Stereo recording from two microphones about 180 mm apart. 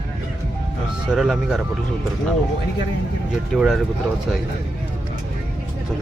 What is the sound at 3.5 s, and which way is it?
Speech, centre (ahead or behind).